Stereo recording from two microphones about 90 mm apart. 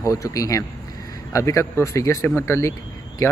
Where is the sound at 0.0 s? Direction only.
40° left (ahead or behind).